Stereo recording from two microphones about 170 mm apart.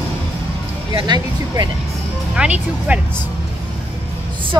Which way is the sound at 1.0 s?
25° right (ahead or behind).